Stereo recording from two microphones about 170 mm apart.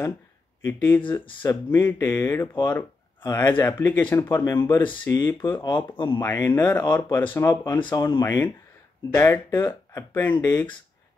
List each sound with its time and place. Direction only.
0.7 s speech: 10° left (ahead or behind)
5.6 s speech: 25° left (ahead or behind)
6.2 s speech: 15° left (ahead or behind)